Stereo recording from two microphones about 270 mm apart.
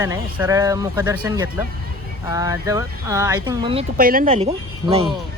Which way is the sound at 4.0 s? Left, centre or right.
Right.